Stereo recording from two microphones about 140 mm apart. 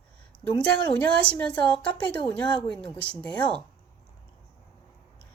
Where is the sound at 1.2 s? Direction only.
10° left (ahead or behind).